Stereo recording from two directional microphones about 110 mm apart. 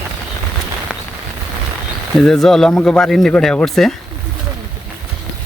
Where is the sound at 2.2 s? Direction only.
5° left (ahead or behind).